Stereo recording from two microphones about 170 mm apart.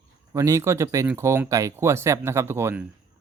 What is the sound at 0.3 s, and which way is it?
Speech, 15° right (ahead or behind).